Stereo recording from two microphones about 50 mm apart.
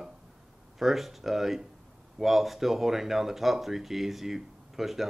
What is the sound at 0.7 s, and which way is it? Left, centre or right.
Speech, centre.